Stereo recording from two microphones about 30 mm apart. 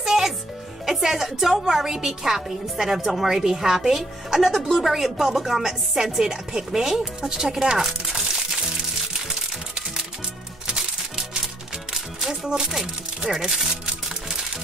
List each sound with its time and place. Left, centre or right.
0.0 s music: centre
0.8 s speech: centre
4.6 s speech: centre
4.8 s speech: centre
12.3 s speech: right
12.6 s speech: centre